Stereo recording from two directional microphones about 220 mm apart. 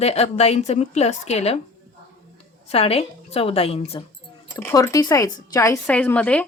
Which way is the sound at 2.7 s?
30° left (ahead or behind).